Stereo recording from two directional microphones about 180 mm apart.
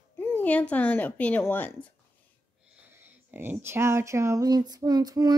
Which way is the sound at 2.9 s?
10° right (ahead or behind).